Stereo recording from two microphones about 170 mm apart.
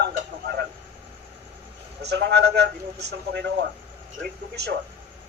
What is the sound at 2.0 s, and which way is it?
A man's voice, 90° right.